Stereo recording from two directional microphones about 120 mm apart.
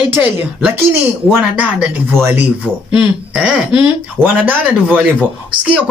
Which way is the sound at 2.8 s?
40° left (ahead or behind).